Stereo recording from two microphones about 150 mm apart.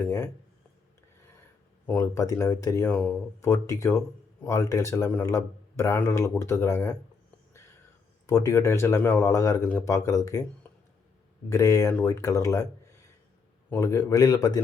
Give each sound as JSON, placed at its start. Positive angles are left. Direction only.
{"t": 0.0, "sound": "speech", "side_deg": 20}
{"t": 1.9, "sound": "speech", "side_deg": 20}
{"t": 8.3, "sound": "speech", "side_deg": 20}
{"t": 10.6, "sound": "a sound", "side_deg": 10}
{"t": 11.4, "sound": "speech", "side_deg": 20}
{"t": 13.7, "sound": "speech", "side_deg": 20}